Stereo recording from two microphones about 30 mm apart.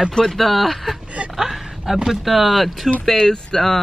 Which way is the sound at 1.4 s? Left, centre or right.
Centre.